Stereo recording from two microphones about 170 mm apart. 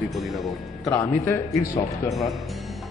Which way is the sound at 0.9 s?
15° left (ahead or behind).